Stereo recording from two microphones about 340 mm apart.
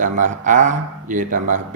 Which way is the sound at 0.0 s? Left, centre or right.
Right.